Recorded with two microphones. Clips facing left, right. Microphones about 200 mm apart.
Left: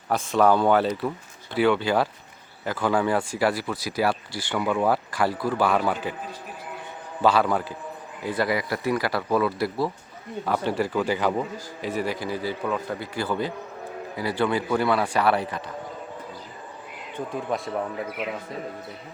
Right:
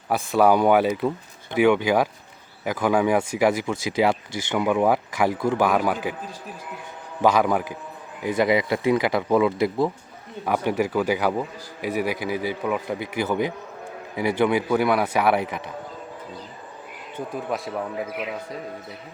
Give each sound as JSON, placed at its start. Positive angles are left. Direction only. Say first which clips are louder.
{"t": 0.1, "sound": "speech", "louder": "right 2 dB", "side_deg": -10}
{"t": 7.2, "sound": "speech", "louder": "right 2 dB", "side_deg": -15}
{"t": 17.2, "sound": "speech", "louder": "even", "side_deg": -5}